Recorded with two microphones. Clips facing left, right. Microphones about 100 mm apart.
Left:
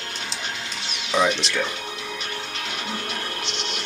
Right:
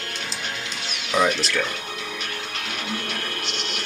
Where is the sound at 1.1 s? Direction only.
5° right (ahead or behind).